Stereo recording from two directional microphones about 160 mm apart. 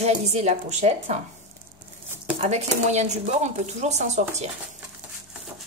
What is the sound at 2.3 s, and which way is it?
A woman's voice, 45° right (ahead or behind).